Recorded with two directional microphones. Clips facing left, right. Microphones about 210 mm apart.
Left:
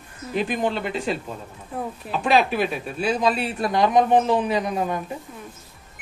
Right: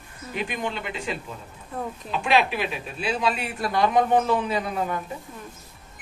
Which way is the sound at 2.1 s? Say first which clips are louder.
Left 3 dB; 40° left (ahead or behind).